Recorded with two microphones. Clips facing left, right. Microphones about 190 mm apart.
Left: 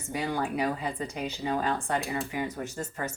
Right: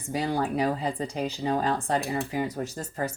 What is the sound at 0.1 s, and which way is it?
Speech, 35° right (ahead or behind).